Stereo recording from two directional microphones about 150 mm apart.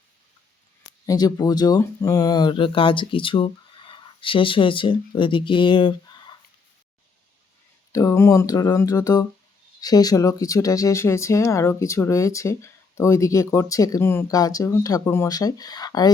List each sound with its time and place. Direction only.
0.9 s speech: 25° left (ahead or behind)
7.9 s speech: 20° left (ahead or behind)